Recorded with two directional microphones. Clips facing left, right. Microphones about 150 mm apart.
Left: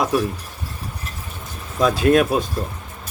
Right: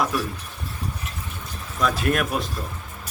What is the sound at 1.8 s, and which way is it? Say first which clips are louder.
Speech: left 7 dB; 25° left (ahead or behind).